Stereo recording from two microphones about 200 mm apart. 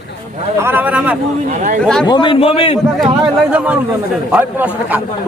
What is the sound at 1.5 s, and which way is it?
Speech, 40° right (ahead or behind).